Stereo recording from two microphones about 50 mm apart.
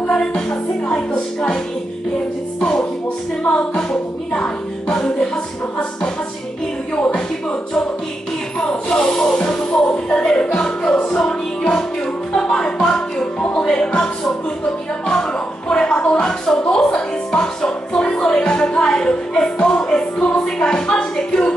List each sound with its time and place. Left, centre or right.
0.0 s music: centre
3.4 s music: centre
7.0 s speech: centre
8.5 s music: centre
15.0 s speech: centre